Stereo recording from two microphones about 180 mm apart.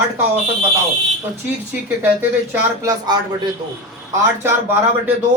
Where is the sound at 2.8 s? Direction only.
20° right (ahead or behind).